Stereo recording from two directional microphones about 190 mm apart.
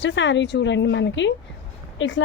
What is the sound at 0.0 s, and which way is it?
A woman's voice, 70° left (ahead or behind).